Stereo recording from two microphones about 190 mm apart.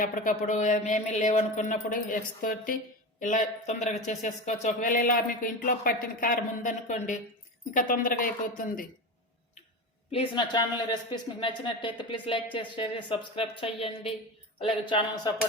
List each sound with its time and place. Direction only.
0.0 s speech: 40° left (ahead or behind)
10.1 s speech: 25° left (ahead or behind)